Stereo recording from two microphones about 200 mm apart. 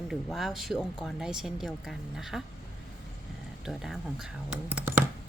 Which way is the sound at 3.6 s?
Centre (ahead or behind).